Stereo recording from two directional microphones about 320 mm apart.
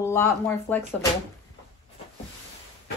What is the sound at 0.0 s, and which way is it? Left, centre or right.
Speech, centre.